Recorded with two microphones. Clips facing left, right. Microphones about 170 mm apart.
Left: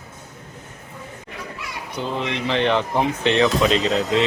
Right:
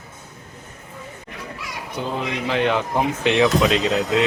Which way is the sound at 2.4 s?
5° right (ahead or behind).